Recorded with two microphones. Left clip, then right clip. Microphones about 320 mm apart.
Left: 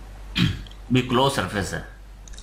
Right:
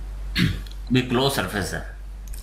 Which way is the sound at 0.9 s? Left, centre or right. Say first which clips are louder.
Left 1 dB; centre.